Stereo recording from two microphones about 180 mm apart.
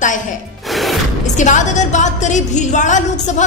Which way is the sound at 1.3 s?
40° left (ahead or behind).